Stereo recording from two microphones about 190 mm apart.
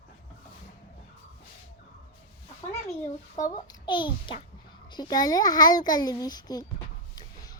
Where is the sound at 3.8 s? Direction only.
25° left (ahead or behind).